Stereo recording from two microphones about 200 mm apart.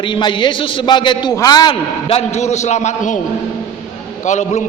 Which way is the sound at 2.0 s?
35° left (ahead or behind).